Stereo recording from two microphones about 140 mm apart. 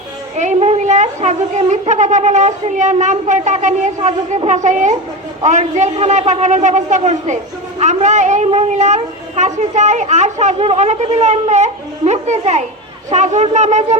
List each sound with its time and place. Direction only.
0.3 s a child's voice: 50° right (ahead or behind)